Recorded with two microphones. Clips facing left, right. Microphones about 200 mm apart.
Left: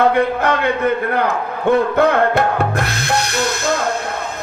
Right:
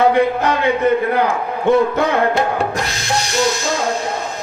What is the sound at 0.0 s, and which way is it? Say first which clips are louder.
Speech: right 1 dB; 60° left (ahead or behind).